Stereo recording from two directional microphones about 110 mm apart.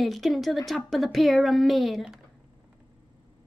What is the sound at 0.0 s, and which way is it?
Speech, centre (ahead or behind).